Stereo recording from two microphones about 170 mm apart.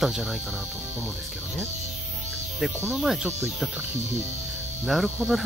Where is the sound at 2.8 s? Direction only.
10° right (ahead or behind).